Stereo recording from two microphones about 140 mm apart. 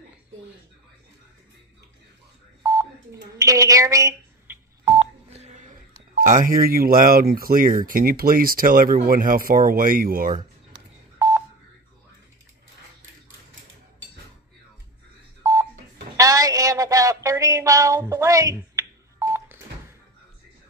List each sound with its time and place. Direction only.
2.6 s telephone dialing: 25° right (ahead or behind)
3.3 s a sound: 25° right (ahead or behind)
4.8 s telephone dialing: 45° right (ahead or behind)
6.1 s speech: 65° right (ahead or behind); by 10.4 s 85° right
16.2 s a sound: 25° right (ahead or behind)
18.1 s telephone dialing: 20° right (ahead or behind)